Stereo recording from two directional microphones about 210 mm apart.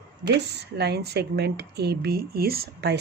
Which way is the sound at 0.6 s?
50° right (ahead or behind).